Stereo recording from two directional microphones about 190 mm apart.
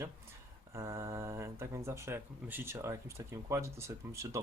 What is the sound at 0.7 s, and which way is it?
Speech, 15° right (ahead or behind).